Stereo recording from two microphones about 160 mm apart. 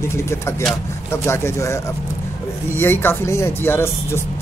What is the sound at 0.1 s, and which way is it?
Speech, 15° left (ahead or behind).